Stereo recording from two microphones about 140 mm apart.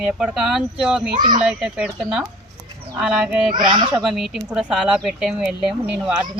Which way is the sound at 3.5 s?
30° right (ahead or behind).